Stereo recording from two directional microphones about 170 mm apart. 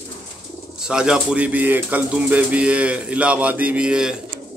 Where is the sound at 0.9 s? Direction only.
5° right (ahead or behind).